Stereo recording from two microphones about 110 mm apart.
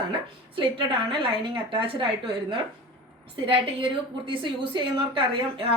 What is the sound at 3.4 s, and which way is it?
A woman's voice, 55° right (ahead or behind).